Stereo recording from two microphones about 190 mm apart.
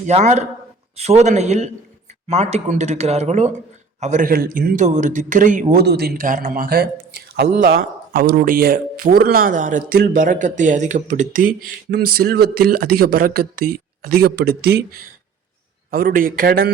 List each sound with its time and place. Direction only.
0.0 s a man's voice: 40° right (ahead or behind)
5.7 s a man's voice: 60° right (ahead or behind)
15.9 s a man's voice: 50° right (ahead or behind)